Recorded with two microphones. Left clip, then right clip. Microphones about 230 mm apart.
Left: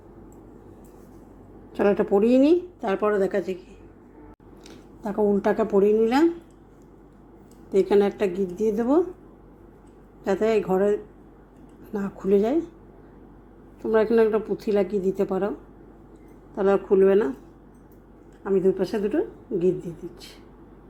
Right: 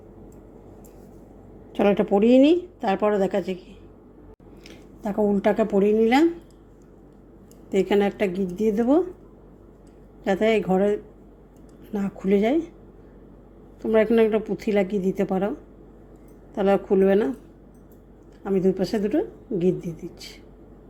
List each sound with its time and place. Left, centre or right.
1.7 s speech: centre
4.6 s speech: centre
7.7 s speech: centre
10.2 s speech: centre
11.9 s a woman's voice: centre
13.8 s a woman's voice: centre
16.6 s speech: right
18.4 s speech: right